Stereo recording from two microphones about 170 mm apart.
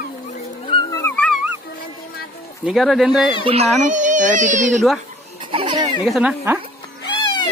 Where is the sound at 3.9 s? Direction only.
45° right (ahead or behind).